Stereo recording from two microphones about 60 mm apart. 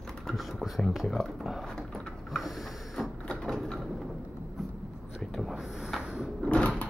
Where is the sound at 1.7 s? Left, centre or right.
Centre.